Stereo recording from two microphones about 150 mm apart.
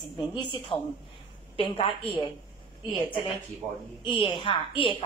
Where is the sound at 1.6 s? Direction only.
35° left (ahead or behind).